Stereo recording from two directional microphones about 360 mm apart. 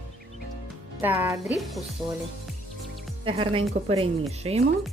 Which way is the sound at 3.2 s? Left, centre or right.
Centre.